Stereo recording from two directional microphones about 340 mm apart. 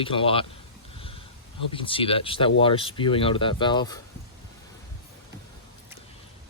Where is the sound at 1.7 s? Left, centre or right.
Centre.